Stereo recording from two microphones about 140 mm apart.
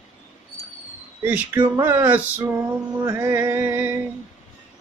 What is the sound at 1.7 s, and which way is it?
Mantra, 15° right (ahead or behind).